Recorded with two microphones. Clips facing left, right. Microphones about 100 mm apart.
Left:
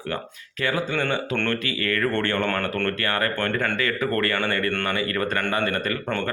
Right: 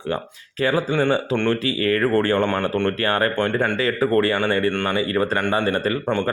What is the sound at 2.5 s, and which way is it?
Speech, 20° right (ahead or behind).